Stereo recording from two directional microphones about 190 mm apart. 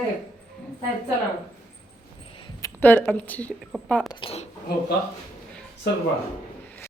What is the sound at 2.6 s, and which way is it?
A woman's voice, 15° left (ahead or behind).